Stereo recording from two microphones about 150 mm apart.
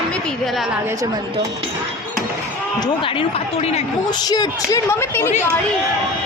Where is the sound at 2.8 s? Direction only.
35° left (ahead or behind).